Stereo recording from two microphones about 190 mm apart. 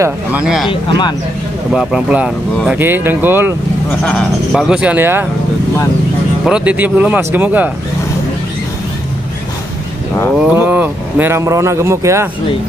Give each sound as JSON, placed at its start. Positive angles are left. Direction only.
{"t": 0.0, "sound": "speech", "side_deg": -5}
{"t": 0.7, "sound": "speech", "side_deg": 25}
{"t": 1.7, "sound": "speech", "side_deg": -5}
{"t": 4.0, "sound": "speech", "side_deg": 5}
{"t": 6.4, "sound": "speech", "side_deg": -5}
{"t": 10.3, "sound": "speech", "side_deg": -10}